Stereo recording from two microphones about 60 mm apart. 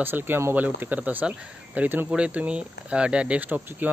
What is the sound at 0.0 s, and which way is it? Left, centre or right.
Speech, right.